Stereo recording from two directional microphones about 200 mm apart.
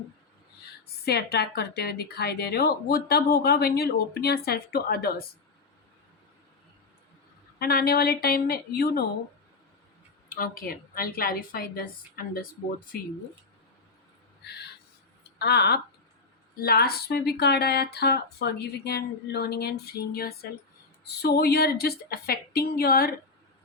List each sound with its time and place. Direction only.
1.0 s speech: 50° left (ahead or behind)
7.6 s speech: 50° left (ahead or behind)
10.2 s speech: 45° left (ahead or behind)
14.4 s a sound: 55° left (ahead or behind)
15.4 s speech: 55° left (ahead or behind)